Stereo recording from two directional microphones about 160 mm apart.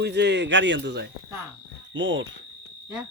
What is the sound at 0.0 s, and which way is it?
Speech, 90° right.